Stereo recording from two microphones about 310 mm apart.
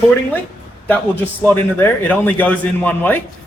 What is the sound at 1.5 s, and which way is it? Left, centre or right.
A man's voice, centre.